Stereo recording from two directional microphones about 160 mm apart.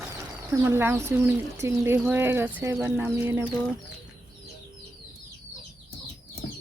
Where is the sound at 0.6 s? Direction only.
15° right (ahead or behind).